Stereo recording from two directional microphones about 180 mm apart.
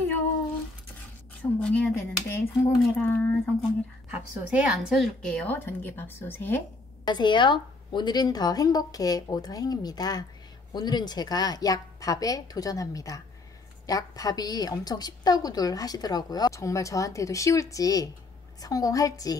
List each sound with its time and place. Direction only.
1.4 s speech: 10° left (ahead or behind)
4.1 s a woman's voice: 5° right (ahead or behind); by 6.6 s 10° left (ahead or behind)
7.1 s a woman's voice: 25° left (ahead or behind)